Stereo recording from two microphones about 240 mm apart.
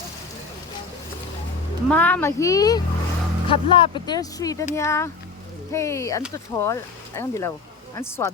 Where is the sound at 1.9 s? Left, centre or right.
Centre.